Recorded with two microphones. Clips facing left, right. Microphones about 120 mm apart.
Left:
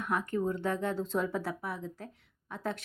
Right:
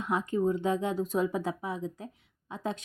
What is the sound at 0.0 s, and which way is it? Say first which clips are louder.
Speech: right 3 dB; 20° right (ahead or behind).